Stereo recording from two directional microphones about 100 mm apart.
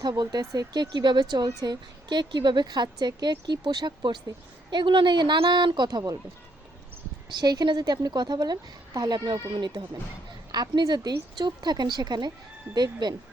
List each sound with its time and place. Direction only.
0.0 s speech: 40° right (ahead or behind)
7.3 s speech: 45° right (ahead or behind)